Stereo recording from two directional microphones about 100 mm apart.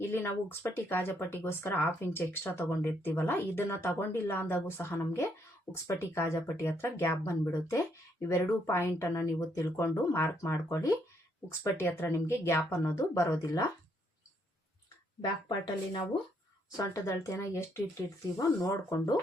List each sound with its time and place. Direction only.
0.1 s speech: 20° left (ahead or behind)
11.8 s speech: 20° left (ahead or behind)
15.2 s speech: 55° left (ahead or behind)
16.7 s speech: 30° left (ahead or behind)